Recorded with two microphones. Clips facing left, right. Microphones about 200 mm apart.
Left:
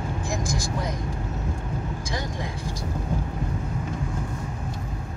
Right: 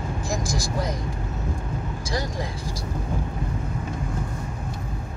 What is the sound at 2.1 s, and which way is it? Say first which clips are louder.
Vehicle: right 5 dB; 40° right (ahead or behind).